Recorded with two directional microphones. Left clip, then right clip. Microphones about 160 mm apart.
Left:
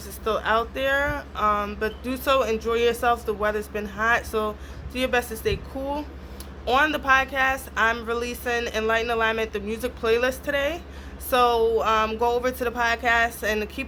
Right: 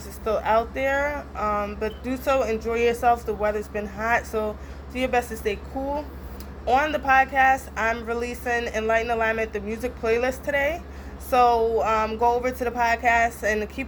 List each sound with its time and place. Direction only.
0.3 s speech: 25° left (ahead or behind)
6.7 s speech: 30° left (ahead or behind)